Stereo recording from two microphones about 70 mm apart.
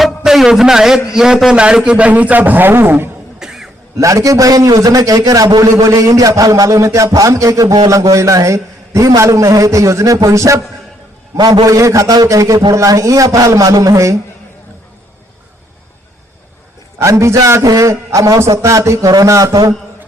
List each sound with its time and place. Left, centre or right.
0.0 s a man's voice: centre; by 3.1 s right
3.4 s throat clearing: centre
3.9 s a man's voice: right
11.3 s a man's voice: right
17.0 s a man's voice: right